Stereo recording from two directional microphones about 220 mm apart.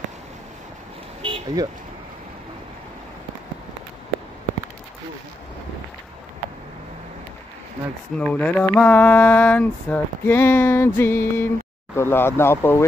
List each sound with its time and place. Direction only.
1.2 s vehicle: 20° right (ahead or behind)
8.2 s mantra: 5° left (ahead or behind)